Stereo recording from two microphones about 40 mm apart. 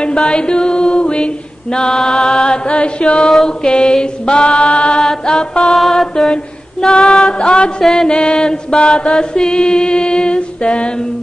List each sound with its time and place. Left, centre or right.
0.0 s mantra: left
3.4 s chant: centre
5.6 s mantra: centre
7.3 s chant: left
7.8 s mantra: centre
8.1 s chant: left